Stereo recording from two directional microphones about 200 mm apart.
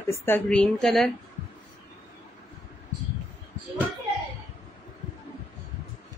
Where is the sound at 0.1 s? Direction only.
10° left (ahead or behind).